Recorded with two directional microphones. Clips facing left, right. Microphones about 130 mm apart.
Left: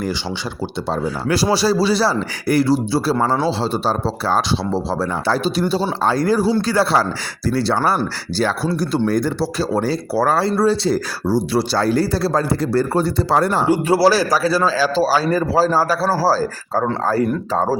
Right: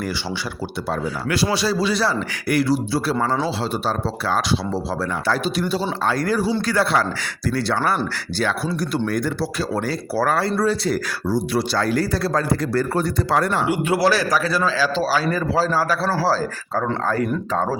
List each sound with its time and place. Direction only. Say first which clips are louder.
0.9 s speech: left 4 dB; 35° left (ahead or behind)